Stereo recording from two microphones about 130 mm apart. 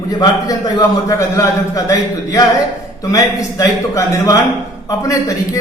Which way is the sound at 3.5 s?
25° left (ahead or behind).